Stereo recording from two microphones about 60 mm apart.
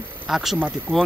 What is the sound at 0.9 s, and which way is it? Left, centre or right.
Speech, right.